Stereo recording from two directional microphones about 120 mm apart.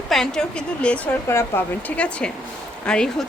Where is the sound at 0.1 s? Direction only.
5° left (ahead or behind).